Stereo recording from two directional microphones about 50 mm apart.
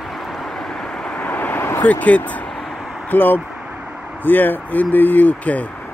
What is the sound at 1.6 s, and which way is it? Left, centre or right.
Vehicle, left.